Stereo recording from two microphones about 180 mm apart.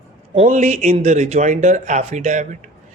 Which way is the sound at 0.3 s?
40° right (ahead or behind).